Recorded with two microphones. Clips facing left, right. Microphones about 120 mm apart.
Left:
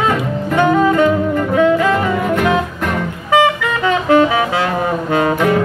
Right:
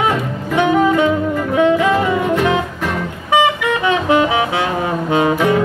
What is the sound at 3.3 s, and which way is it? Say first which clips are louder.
Music: left 1 dB; 15° right (ahead or behind).